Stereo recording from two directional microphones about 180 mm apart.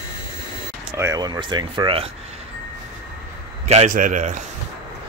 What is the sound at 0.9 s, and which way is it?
Speech, 15° right (ahead or behind).